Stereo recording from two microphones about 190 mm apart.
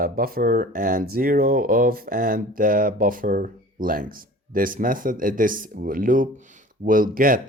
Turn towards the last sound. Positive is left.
turn(degrees=-45)  # may be behind; listen again after turning